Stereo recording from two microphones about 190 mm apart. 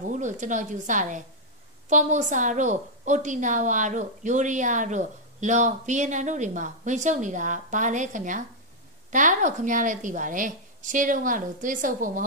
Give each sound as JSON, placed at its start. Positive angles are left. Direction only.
{"t": 0.1, "sound": "a woman's voice", "side_deg": -40}